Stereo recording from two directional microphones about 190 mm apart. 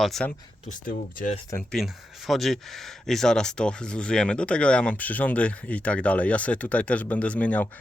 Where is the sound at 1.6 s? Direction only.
Centre (ahead or behind).